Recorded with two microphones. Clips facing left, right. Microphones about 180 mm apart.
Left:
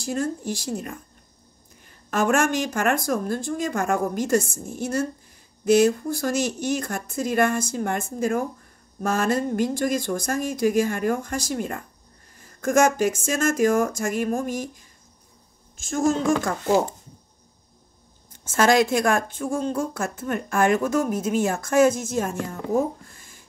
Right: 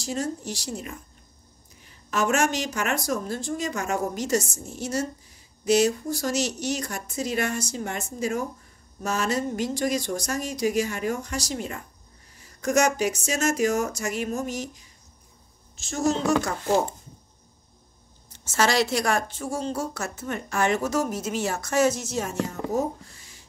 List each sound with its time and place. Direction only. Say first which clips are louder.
0.0 s a woman's voice: left 3 dB; 55° left (ahead or behind)
18.3 s a woman's voice: left 5 dB; 50° left (ahead or behind)